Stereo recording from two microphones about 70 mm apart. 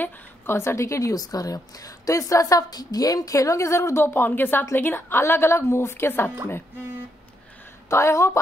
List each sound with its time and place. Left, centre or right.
0.0 s a woman's voice: left
7.9 s a woman's voice: left